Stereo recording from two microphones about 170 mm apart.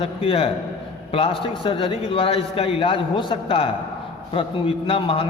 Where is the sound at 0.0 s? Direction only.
35° left (ahead or behind).